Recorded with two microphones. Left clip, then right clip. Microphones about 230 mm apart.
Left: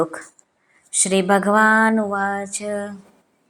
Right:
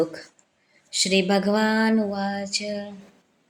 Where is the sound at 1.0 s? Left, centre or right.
Centre.